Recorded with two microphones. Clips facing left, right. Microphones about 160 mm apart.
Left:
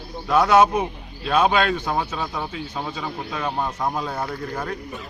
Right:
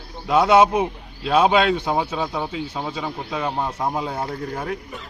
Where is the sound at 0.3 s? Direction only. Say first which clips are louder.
Right 1 dB; 20° right (ahead or behind).